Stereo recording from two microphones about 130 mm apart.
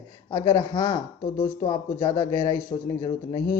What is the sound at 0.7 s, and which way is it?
Speech, 45° left (ahead or behind).